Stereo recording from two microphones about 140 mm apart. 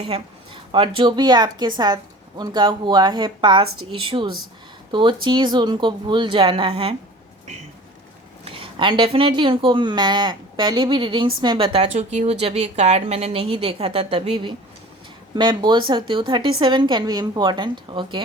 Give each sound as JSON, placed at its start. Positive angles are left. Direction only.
{"t": 0.1, "sound": "a woman's voice", "side_deg": -35}
{"t": 8.4, "sound": "speech", "side_deg": -40}